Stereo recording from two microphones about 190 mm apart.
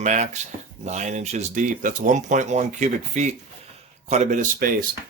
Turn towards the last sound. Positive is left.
turn(degrees=-45)  # may be behind; listen again after turning